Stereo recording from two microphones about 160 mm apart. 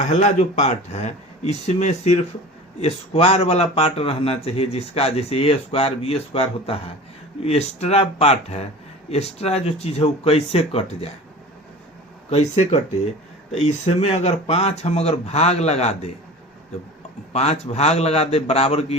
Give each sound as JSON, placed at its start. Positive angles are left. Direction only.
{"t": 0.0, "sound": "speech", "side_deg": 45}
{"t": 12.3, "sound": "speech", "side_deg": 45}
{"t": 17.3, "sound": "speech", "side_deg": 40}